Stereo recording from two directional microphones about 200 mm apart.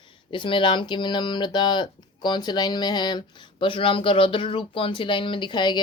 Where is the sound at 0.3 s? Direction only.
25° left (ahead or behind).